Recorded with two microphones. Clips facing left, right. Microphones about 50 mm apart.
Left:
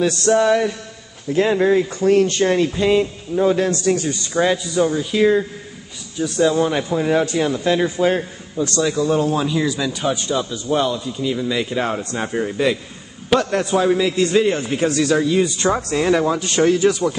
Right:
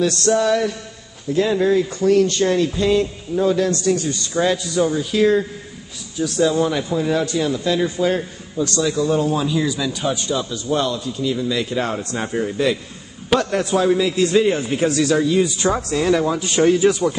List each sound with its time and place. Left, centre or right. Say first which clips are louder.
0.0 s speech: left 1 dB; left
3.8 s speech: left 1 dB; left
4.3 s a man's voice: left 1 dB; centre
6.7 s speech: left 2 dB; left
8.8 s a man's voice: left 1 dB; centre
15.7 s speech: left 1 dB; left
16.3 s a man's voice: right 1 dB; centre